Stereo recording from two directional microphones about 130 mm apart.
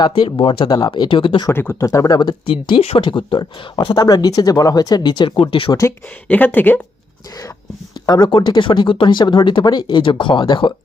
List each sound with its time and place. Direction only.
0.0 s speech: 40° left (ahead or behind)
1.5 s speech: 20° left (ahead or behind); by 5.7 s 40° left (ahead or behind)
6.2 s speech: 15° left (ahead or behind)
8.0 s speech: 30° left (ahead or behind)